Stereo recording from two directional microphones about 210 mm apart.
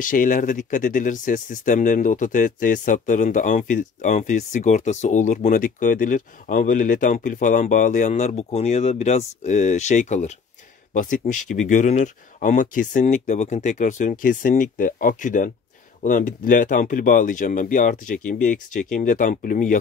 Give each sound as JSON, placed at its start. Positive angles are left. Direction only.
{"t": 0.0, "sound": "speech", "side_deg": 40}